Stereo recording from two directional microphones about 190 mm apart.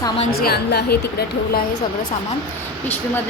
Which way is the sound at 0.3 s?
55° left (ahead or behind).